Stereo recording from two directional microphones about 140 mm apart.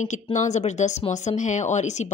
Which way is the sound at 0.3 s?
55° left (ahead or behind).